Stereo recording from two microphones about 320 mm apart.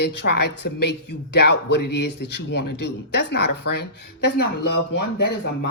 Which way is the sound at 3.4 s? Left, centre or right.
Left.